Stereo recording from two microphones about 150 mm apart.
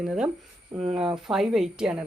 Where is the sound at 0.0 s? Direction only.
5° right (ahead or behind).